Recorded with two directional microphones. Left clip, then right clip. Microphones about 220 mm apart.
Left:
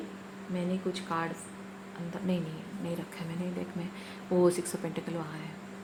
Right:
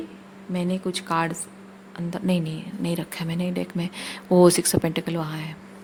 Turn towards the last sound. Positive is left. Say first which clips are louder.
# right 9 dB
turn(degrees=-45)  # may be behind; listen again after turning